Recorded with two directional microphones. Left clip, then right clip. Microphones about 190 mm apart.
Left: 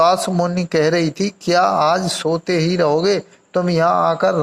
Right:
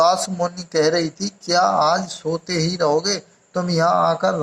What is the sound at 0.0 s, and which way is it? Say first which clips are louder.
Speech: left 2 dB; 30° left (ahead or behind).